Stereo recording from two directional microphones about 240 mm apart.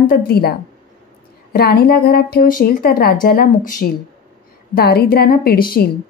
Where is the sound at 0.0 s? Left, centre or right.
Left.